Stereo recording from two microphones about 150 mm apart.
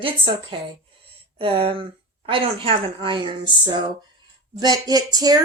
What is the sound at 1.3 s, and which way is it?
Speech, 35° right (ahead or behind).